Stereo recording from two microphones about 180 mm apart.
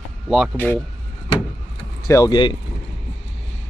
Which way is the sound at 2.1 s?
20° left (ahead or behind).